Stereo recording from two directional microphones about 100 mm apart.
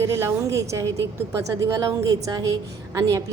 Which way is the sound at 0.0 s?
30° right (ahead or behind).